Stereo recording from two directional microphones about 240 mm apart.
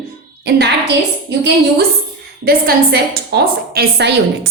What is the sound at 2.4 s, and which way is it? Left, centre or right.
A woman's voice, right.